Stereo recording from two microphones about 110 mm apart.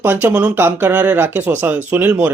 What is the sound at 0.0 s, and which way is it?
Speech, 20° right (ahead or behind).